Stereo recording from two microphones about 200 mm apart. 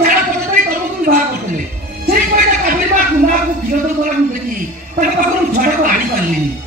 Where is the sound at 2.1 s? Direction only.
45° right (ahead or behind).